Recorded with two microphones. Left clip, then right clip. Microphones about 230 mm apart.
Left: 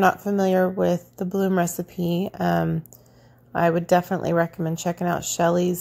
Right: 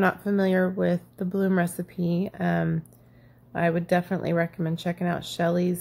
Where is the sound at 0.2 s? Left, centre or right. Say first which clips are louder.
Left 3 dB; centre.